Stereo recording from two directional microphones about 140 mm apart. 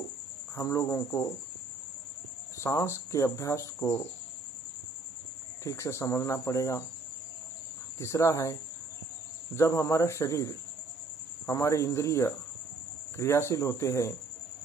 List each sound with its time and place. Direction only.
0.6 s speech: 20° left (ahead or behind)
2.6 s speech: 20° left (ahead or behind)
5.6 s speech: 20° left (ahead or behind)
8.0 s speech: 20° left (ahead or behind)
9.6 s speech: 20° left (ahead or behind)